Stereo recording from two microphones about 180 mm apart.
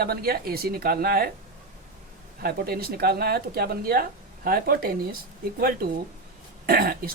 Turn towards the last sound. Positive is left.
turn(degrees=-55)  # may be behind; listen again after turning